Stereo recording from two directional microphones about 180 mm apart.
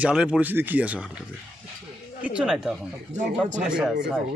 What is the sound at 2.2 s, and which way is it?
A man's voice, 5° right (ahead or behind).